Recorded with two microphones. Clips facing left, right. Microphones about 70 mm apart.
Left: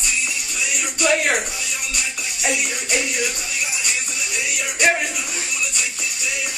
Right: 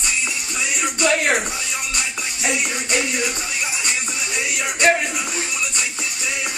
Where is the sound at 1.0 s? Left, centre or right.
Centre.